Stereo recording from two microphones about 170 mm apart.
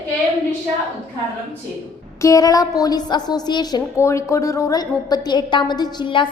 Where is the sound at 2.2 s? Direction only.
20° left (ahead or behind).